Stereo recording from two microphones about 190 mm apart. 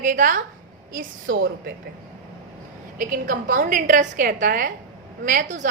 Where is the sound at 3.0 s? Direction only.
45° right (ahead or behind).